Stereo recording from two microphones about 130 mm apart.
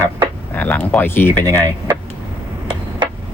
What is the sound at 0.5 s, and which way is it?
Speech, 15° left (ahead or behind).